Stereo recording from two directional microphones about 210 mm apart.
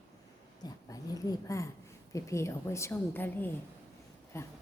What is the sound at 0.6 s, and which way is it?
A woman's voice, 15° left (ahead or behind).